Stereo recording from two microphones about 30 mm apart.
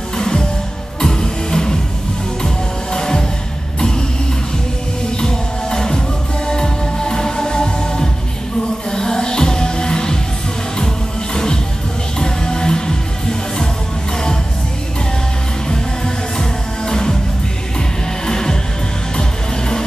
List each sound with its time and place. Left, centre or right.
0.2 s music: left
5.1 s music: left
11.3 s music: left
15.7 s music: centre